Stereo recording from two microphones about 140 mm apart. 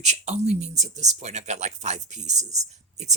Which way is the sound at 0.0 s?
55° right (ahead or behind).